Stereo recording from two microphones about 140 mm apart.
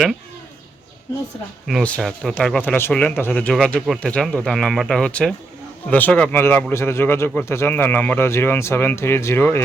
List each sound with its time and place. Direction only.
1.8 s a man's voice: 10° left (ahead or behind)